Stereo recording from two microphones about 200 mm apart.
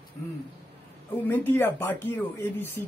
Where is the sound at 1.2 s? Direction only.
10° left (ahead or behind).